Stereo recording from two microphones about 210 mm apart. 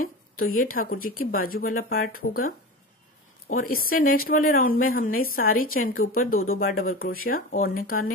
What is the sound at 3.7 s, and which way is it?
A woman's voice, 45° left (ahead or behind).